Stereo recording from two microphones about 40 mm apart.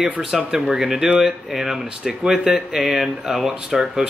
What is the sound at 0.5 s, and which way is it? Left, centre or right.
Speech, centre.